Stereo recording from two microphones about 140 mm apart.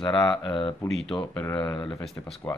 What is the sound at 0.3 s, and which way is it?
Speech, 35° left (ahead or behind).